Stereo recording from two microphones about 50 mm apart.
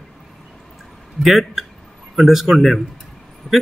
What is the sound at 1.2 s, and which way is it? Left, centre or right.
A man's voice, centre.